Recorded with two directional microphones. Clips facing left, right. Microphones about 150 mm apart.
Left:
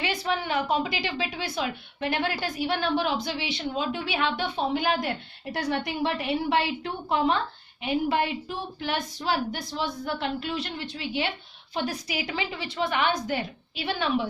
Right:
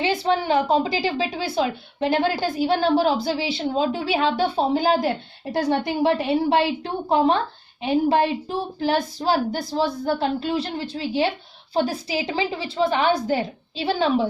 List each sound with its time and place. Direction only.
0.0 s a woman's voice: 30° right (ahead or behind)